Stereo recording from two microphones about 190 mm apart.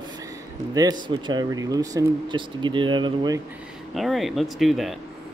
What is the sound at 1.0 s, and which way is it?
Speech, 25° right (ahead or behind).